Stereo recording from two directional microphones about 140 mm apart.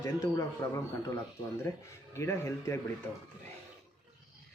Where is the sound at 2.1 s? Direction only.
20° left (ahead or behind).